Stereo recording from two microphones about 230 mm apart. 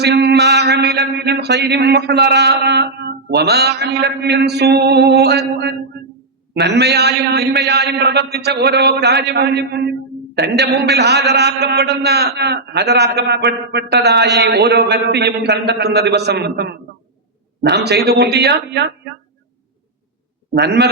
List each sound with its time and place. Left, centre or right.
0.0 s a man's voice: right
20.5 s a man's voice: right